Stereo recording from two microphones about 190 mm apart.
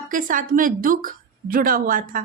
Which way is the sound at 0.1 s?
45° right (ahead or behind).